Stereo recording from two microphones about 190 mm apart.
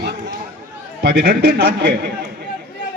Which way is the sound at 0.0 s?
60° right (ahead or behind).